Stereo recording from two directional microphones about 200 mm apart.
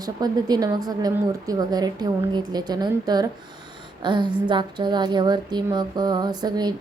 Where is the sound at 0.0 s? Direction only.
20° right (ahead or behind).